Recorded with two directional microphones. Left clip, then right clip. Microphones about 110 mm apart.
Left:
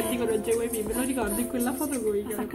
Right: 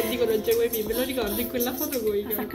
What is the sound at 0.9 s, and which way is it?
Speech, 65° left (ahead or behind).